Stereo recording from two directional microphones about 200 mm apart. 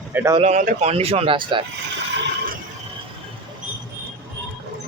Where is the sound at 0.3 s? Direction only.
35° right (ahead or behind).